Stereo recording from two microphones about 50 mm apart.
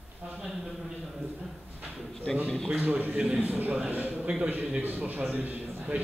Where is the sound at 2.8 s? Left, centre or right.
Right.